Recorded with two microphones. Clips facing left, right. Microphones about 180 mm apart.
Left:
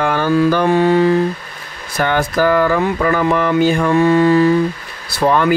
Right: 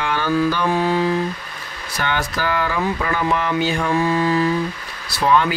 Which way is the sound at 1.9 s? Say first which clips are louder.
Left 7 dB; 50° left (ahead or behind).